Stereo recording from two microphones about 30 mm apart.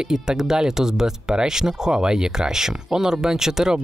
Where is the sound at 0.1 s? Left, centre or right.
Centre.